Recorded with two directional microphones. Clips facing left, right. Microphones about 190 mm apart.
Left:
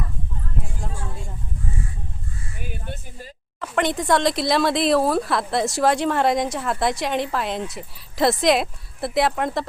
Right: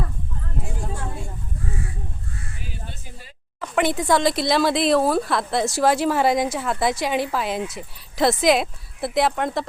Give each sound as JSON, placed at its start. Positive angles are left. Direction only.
{"t": 2.6, "sound": "music", "side_deg": 55}
{"t": 3.6, "sound": "speech", "side_deg": -5}